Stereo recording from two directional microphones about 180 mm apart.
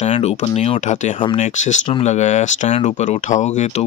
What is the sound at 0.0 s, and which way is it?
Speech, 35° left (ahead or behind).